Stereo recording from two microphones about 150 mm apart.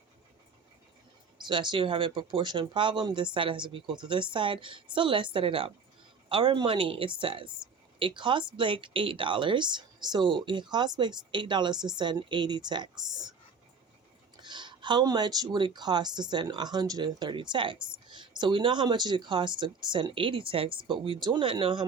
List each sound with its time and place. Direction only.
1.5 s speech: 30° right (ahead or behind)
14.4 s speech: 30° right (ahead or behind)